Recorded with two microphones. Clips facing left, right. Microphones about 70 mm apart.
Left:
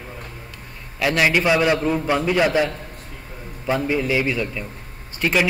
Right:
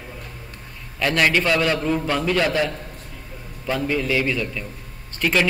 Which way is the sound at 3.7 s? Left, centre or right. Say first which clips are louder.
Left 2 dB; centre.